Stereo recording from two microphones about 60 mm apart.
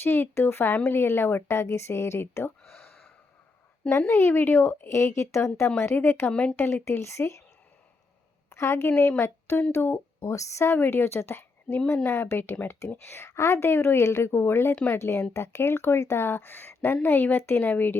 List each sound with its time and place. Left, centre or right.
0.0 s a woman's voice: left
3.8 s a woman's voice: left
4.1 s a woman's voice: left
5.6 s speech: left
6.3 s speech: centre
6.8 s a woman's voice: left
8.4 s a woman's voice: left
10.2 s a woman's voice: left